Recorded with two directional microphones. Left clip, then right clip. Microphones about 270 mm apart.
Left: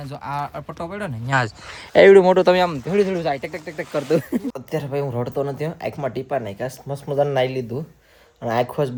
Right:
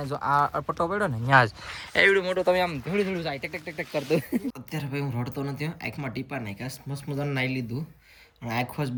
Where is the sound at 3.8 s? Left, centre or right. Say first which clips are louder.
Left 6 dB; left.